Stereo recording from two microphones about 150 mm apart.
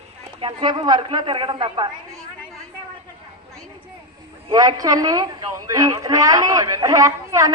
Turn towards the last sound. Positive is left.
turn(degrees=-20)  # may be behind; listen again after turning